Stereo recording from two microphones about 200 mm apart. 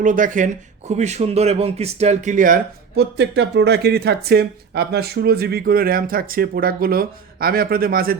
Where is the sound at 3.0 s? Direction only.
55° right (ahead or behind).